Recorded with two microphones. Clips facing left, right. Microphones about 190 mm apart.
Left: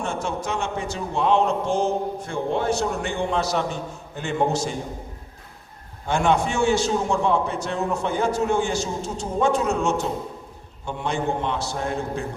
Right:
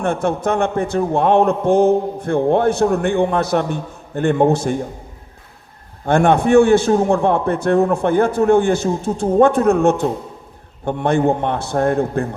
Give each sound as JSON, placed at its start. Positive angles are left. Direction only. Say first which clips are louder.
{"t": 0.0, "sound": "a man's voice", "louder": "right 9 dB", "side_deg": -60}
{"t": 6.1, "sound": "a man's voice", "louder": "right 8 dB", "side_deg": -60}